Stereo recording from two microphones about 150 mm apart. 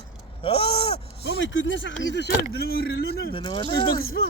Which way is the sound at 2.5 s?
90° left.